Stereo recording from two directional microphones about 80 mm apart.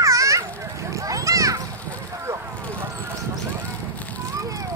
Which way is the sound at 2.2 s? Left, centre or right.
Right.